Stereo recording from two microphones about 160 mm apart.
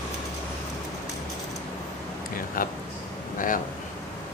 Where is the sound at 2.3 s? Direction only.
60° left (ahead or behind).